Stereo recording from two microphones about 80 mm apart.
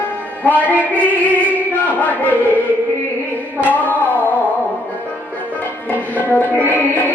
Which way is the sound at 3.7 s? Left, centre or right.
Left.